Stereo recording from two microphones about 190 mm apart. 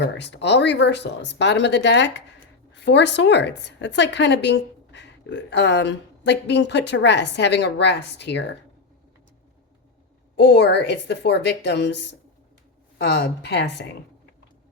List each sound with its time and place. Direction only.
0.0 s a woman's voice: 65° left (ahead or behind)
10.3 s speech: 65° left (ahead or behind)
13.0 s speech: 60° left (ahead or behind)